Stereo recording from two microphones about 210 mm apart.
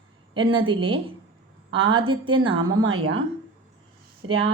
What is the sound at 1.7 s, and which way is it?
Speech, 70° right (ahead or behind).